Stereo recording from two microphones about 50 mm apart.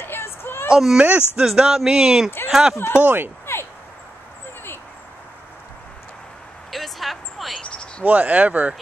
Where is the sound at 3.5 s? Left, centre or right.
Left.